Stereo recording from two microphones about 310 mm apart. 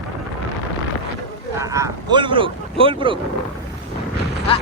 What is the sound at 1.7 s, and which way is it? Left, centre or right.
Speech, centre.